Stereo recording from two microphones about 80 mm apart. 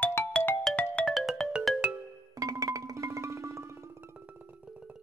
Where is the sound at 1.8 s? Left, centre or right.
Right.